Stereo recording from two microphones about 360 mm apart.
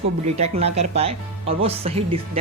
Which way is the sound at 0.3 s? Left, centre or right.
Centre.